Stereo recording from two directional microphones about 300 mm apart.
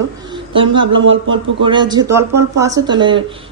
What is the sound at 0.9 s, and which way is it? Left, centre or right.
Speech, right.